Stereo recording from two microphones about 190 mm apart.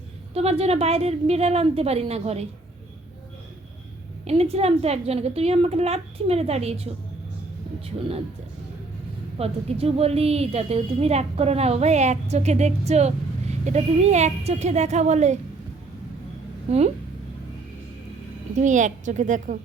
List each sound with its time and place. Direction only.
0.3 s a woman's voice: 35° right (ahead or behind)
4.3 s a woman's voice: 30° right (ahead or behind)
9.4 s a woman's voice: 30° right (ahead or behind)
18.5 s a woman's voice: 40° right (ahead or behind)